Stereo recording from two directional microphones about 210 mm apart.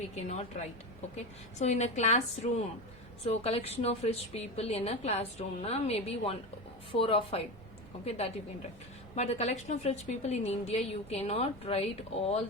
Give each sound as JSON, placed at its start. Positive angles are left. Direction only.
{"t": 1.1, "sound": "a woman's voice", "side_deg": 35}